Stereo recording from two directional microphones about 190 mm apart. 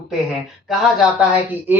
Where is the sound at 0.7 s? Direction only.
Centre (ahead or behind).